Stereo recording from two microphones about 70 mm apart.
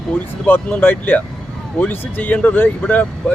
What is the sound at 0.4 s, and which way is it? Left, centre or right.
Speech, left.